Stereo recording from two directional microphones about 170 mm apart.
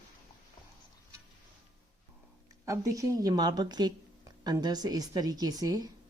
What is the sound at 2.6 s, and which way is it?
A woman's voice, 20° right (ahead or behind).